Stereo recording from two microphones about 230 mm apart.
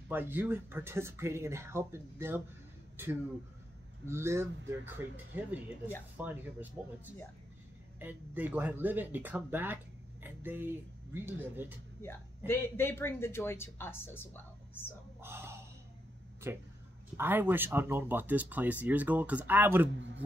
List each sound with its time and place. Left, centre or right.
0.1 s speech: centre
12.0 s speech: centre
15.1 s speech: centre
17.2 s speech: centre
19.9 s a man's voice: right